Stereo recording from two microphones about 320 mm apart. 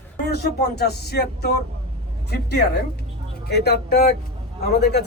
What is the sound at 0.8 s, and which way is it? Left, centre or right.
Speech, left.